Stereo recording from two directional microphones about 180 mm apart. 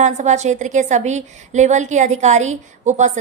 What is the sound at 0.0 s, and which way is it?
A woman's voice, 40° right (ahead or behind).